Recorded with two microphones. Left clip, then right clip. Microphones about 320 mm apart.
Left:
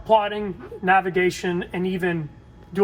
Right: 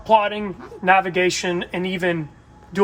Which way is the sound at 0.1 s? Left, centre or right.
Right.